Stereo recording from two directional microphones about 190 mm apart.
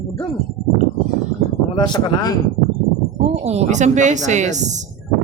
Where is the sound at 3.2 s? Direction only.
35° right (ahead or behind).